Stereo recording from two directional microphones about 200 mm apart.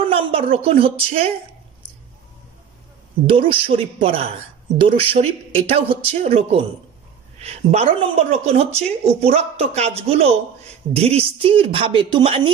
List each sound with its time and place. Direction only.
0.1 s speech: 30° right (ahead or behind)
3.3 s speech: 25° right (ahead or behind)